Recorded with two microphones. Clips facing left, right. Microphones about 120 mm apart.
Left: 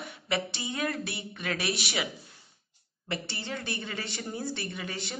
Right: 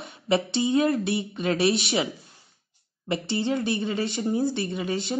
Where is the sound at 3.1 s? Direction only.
20° right (ahead or behind).